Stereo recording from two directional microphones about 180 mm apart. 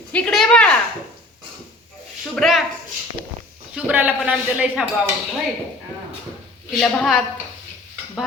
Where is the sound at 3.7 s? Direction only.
10° right (ahead or behind).